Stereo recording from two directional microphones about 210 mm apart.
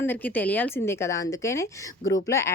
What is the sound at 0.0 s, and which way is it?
A woman's voice, 10° left (ahead or behind).